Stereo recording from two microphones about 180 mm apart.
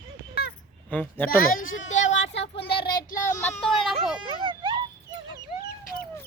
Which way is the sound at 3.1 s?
15° left (ahead or behind).